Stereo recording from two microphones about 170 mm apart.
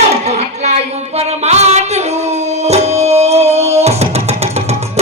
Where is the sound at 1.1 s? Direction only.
40° right (ahead or behind).